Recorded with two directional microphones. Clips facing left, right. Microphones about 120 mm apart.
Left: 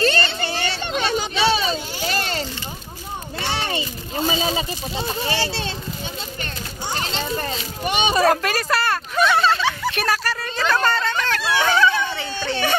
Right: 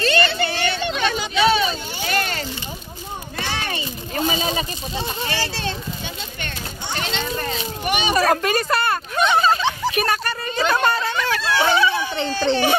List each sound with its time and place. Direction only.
0.0 s children playing: 35° left (ahead or behind)
3.5 s a sound: 25° left (ahead or behind)
6.4 s children playing: 35° left (ahead or behind)
7.9 s a child's voice: 25° left (ahead or behind)
8.3 s speech: centre (ahead or behind)
10.3 s a sound: 10° right (ahead or behind)
12.4 s speech: 20° right (ahead or behind)